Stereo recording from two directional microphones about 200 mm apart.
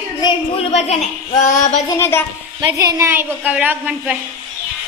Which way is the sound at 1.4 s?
40° left (ahead or behind).